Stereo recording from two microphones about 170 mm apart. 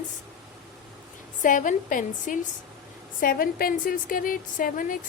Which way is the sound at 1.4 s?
50° left (ahead or behind).